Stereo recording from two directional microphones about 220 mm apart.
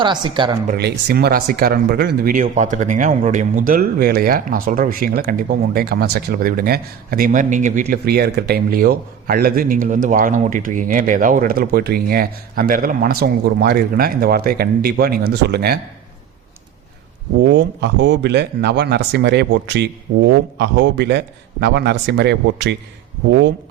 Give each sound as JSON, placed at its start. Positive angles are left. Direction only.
{"t": 0.0, "sound": "a woman's voice", "side_deg": -20}
{"t": 0.7, "sound": "speech", "side_deg": -50}
{"t": 17.5, "sound": "speech", "side_deg": -55}